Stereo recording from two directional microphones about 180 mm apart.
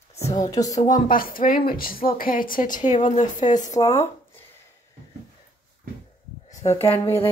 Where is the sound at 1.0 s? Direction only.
50° left (ahead or behind).